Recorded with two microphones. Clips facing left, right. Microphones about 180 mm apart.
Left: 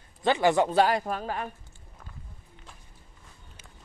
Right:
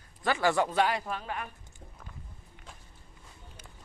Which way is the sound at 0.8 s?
45° left (ahead or behind).